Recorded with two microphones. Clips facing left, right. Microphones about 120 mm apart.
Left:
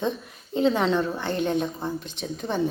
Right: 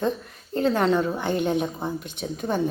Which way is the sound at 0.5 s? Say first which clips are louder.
Right 1 dB; centre (ahead or behind).